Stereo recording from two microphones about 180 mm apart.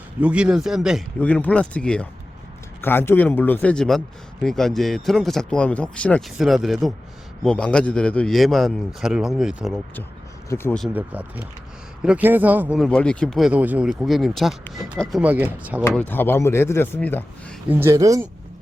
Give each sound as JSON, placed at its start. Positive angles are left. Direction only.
{"t": 0.2, "sound": "a man's voice", "side_deg": -5}
{"t": 1.2, "sound": "a man's voice", "side_deg": 10}
{"t": 10.5, "sound": "speech", "side_deg": 15}
{"t": 12.0, "sound": "a man's voice", "side_deg": -10}
{"t": 15.2, "sound": "speech", "side_deg": -10}
{"t": 16.0, "sound": "speech", "side_deg": 10}
{"t": 17.7, "sound": "speech", "side_deg": -15}